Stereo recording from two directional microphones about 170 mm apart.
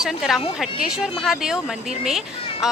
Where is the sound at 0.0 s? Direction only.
Centre (ahead or behind).